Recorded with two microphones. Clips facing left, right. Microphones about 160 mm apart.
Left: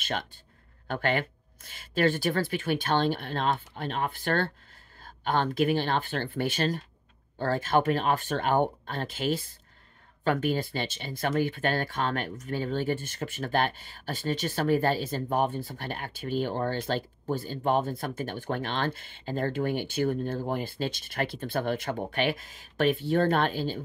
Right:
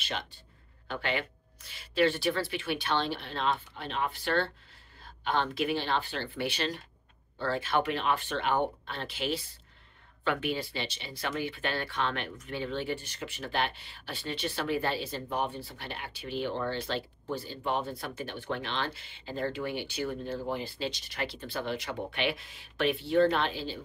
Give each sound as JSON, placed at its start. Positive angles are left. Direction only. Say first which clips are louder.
{"t": 0.0, "sound": "speech", "louder": "left 4 dB", "side_deg": 50}